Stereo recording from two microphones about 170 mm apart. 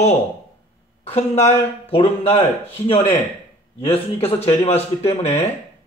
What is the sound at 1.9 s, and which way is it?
Speech, 35° left (ahead or behind).